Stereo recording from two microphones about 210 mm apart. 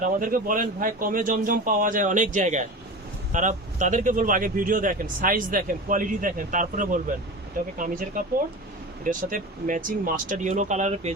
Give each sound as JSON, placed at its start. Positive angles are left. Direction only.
{"t": 0.0, "sound": "speech", "side_deg": -40}